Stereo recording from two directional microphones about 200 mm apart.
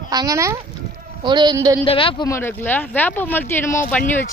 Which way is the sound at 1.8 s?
25° left (ahead or behind).